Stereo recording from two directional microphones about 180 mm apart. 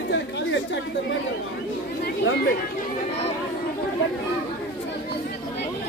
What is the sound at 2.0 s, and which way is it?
Chatter, 70° left (ahead or behind).